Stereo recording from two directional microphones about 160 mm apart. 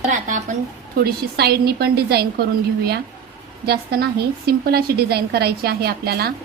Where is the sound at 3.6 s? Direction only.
75° right (ahead or behind).